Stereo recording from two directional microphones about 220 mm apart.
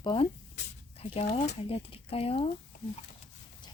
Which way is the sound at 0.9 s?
25° left (ahead or behind).